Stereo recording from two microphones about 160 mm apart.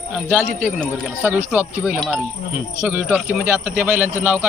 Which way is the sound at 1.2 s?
10° right (ahead or behind).